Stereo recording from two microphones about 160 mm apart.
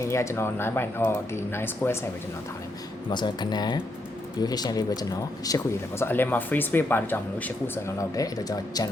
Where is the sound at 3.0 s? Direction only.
30° left (ahead or behind).